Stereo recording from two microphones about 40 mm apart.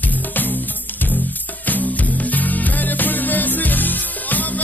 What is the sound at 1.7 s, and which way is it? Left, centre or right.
Music, left.